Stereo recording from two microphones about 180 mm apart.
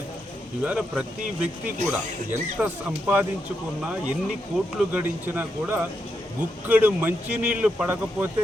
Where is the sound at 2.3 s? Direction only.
10° right (ahead or behind).